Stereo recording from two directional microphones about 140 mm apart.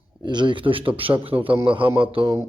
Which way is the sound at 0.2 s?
30° right (ahead or behind).